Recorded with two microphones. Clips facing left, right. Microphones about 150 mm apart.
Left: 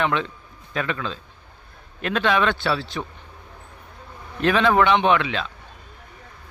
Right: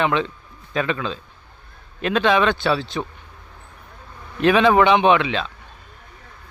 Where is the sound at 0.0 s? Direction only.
20° right (ahead or behind).